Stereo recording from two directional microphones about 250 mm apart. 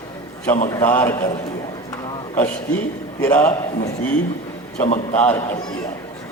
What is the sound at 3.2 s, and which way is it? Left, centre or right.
Speech, centre.